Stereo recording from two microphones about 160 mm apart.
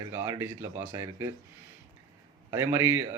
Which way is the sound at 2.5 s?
15° right (ahead or behind).